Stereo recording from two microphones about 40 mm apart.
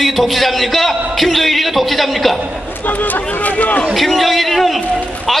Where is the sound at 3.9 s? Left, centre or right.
Centre.